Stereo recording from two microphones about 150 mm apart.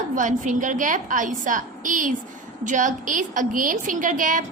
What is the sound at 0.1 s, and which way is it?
A woman's voice, 55° right (ahead or behind).